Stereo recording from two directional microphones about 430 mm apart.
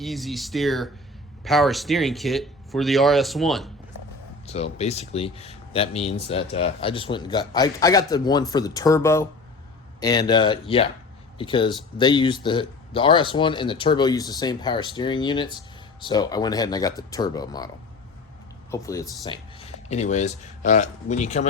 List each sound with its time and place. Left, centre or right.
0.0 s speech: centre
4.4 s speech: centre
18.7 s speech: centre